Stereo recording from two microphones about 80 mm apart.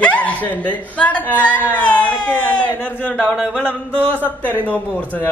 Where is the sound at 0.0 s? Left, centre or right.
Centre.